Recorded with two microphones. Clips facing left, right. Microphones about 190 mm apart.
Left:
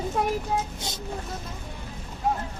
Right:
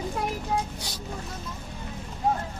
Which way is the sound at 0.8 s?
20° left (ahead or behind).